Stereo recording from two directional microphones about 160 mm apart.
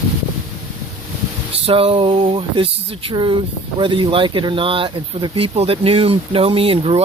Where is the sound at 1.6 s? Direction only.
35° right (ahead or behind).